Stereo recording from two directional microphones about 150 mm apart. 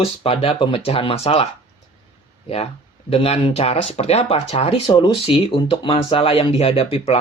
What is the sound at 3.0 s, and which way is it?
Speech, 40° left (ahead or behind).